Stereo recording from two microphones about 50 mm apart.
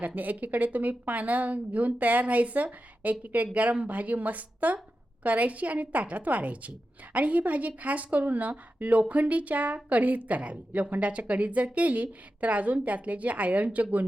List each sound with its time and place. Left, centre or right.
0.0 s a woman's voice: right